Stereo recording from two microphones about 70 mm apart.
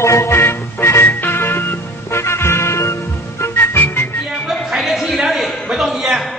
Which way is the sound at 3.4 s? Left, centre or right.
Left.